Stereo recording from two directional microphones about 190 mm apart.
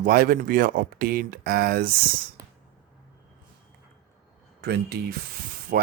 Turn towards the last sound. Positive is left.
turn(degrees=-50)  # may be behind; listen again after turning